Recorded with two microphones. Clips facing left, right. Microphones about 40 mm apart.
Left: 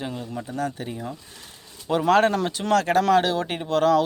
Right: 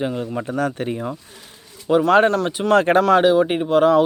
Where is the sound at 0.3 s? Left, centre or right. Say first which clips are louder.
Right 4 dB; right.